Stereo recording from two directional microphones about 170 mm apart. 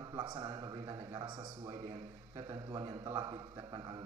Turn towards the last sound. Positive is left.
turn(degrees=-25)  # may be behind; listen again after turning